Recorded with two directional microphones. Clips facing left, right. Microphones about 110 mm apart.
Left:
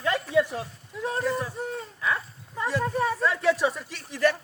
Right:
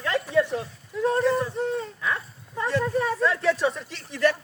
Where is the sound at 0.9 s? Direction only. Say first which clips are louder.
Right 6 dB; 10° left (ahead or behind).